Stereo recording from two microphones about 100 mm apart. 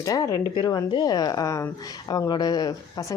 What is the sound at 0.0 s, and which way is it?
Speech, 35° left (ahead or behind).